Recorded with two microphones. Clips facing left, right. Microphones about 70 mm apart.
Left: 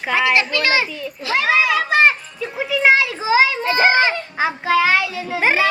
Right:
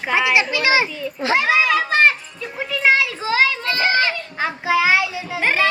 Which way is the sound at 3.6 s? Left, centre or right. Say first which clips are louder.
Left 4 dB; left.